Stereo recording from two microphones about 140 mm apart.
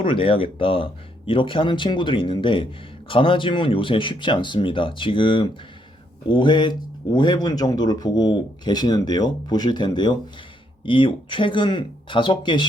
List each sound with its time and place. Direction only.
0.0 s speech: 40° left (ahead or behind)